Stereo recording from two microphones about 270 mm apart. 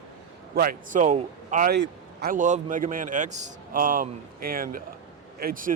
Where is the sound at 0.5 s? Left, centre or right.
Right.